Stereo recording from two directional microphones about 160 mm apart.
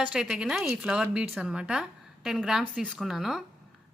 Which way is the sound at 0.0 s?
5° right (ahead or behind).